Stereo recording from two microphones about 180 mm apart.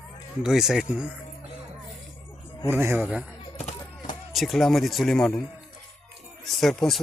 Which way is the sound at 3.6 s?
40° left (ahead or behind).